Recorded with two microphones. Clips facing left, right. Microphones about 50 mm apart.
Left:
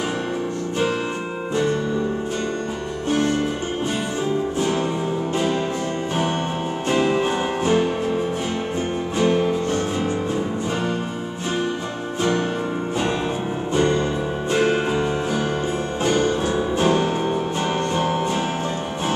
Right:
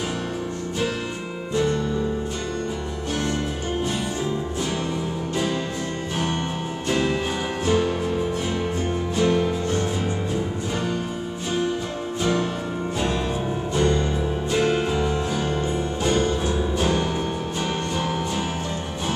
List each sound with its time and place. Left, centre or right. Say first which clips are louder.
1.5 s music: left 1 dB; left
6.9 s music: left 4 dB; left
9.2 s music: left 2 dB; left
12.2 s music: left 2 dB; left
13.7 s music: left 2 dB; left